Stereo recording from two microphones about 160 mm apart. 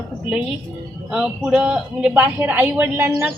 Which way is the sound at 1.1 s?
5° right (ahead or behind).